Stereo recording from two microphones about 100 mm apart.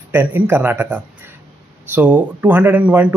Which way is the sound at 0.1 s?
20° right (ahead or behind).